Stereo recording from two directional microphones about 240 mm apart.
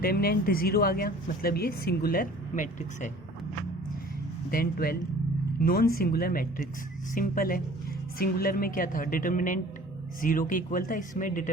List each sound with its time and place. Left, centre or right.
0.0 s speech: left
4.5 s speech: left